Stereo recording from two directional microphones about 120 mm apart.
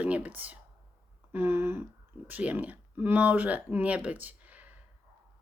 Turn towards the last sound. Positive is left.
turn(degrees=-15)  # may be behind; listen again after turning